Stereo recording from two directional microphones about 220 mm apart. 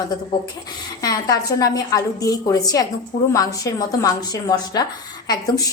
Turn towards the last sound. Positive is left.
turn(degrees=15)  # may be behind; listen again after turning